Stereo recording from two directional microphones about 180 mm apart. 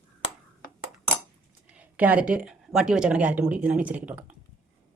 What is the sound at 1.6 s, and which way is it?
A woman's voice, 10° right (ahead or behind).